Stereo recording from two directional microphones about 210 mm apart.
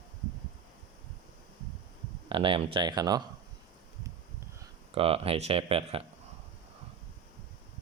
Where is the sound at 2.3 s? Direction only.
25° right (ahead or behind).